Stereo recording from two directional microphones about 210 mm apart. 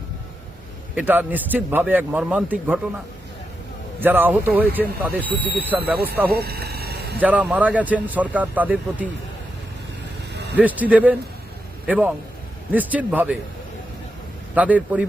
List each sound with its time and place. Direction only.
0.9 s speech: 10° right (ahead or behind)
4.0 s speech: 10° right (ahead or behind)
6.3 s a sound: 50° right (ahead or behind)
7.2 s speech: 5° right (ahead or behind)
10.3 s vehicle: 50° right (ahead or behind)
10.6 s speech: 5° right (ahead or behind)
14.5 s speech: 5° right (ahead or behind)